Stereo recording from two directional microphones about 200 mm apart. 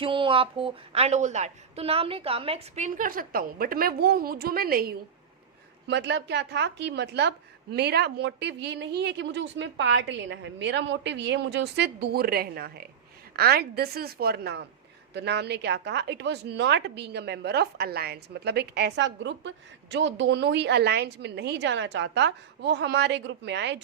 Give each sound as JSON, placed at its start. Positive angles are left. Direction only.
{"t": 0.0, "sound": "a woman's voice", "side_deg": -25}
{"t": 5.9, "sound": "a woman's voice", "side_deg": -60}